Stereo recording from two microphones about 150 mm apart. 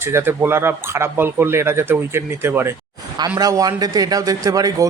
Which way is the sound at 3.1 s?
25° right (ahead or behind).